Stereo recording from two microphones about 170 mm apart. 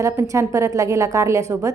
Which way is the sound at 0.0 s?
15° right (ahead or behind).